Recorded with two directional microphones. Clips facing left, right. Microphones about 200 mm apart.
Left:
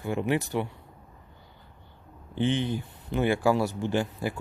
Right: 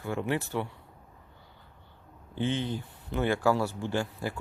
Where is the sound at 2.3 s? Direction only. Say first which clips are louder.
Left 4 dB; 20° left (ahead or behind).